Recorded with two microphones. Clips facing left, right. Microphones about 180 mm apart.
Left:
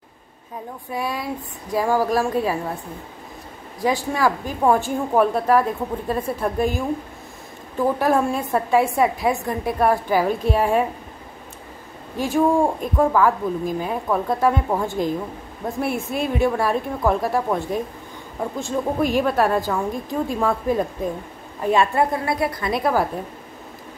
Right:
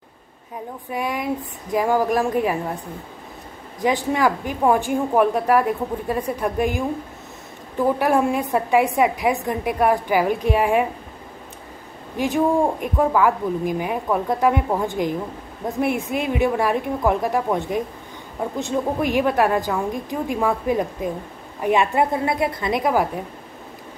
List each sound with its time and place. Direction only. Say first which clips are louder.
0.8 s a woman's voice: right 2 dB; 15° right (ahead or behind)
3.8 s a woman's voice: right 1 dB; 20° right (ahead or behind)
8.0 s a woman's voice: right 1 dB; 15° right (ahead or behind)
12.2 s a woman's voice: left 1 dB; 15° right (ahead or behind)